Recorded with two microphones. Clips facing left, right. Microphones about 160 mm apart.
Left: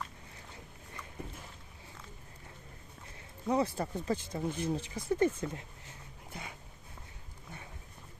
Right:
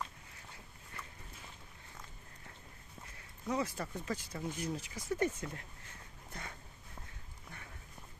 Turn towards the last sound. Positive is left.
turn(degrees=10)  # may be behind; listen again after turning